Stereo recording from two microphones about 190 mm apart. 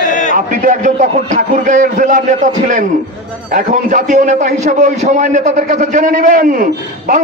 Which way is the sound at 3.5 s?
45° right (ahead or behind).